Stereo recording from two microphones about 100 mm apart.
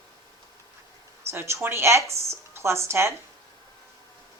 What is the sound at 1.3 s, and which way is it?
A woman's voice, 25° right (ahead or behind).